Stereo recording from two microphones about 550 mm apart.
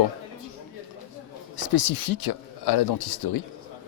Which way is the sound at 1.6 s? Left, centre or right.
Left.